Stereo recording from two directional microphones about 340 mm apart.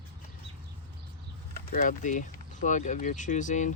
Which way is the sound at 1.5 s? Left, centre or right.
Left.